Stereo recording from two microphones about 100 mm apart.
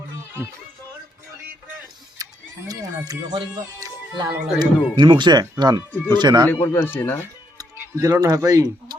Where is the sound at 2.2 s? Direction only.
40° right (ahead or behind).